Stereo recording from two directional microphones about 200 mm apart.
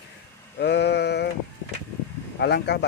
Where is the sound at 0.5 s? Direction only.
55° left (ahead or behind).